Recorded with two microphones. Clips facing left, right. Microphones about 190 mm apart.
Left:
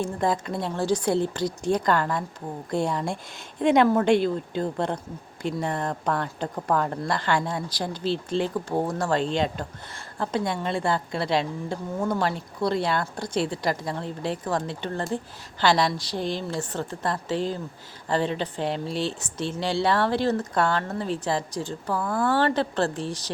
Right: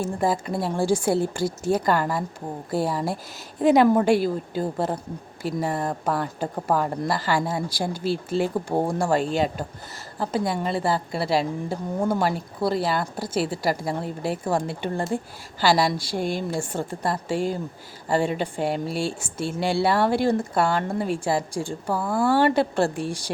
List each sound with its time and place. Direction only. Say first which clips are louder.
0.0 s a woman's voice: right 1 dB; 5° right (ahead or behind)